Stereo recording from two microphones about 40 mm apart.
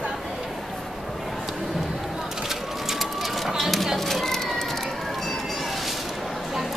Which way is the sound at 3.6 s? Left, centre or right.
Centre.